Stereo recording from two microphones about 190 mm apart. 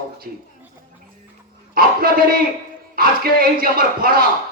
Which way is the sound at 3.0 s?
50° right (ahead or behind).